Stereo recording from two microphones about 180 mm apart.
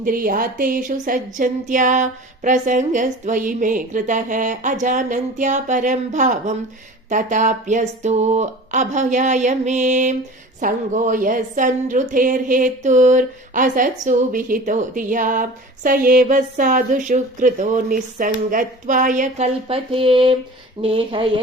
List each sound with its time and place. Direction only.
0.0 s a woman's voice: 50° right (ahead or behind)
19.6 s speech: 30° right (ahead or behind)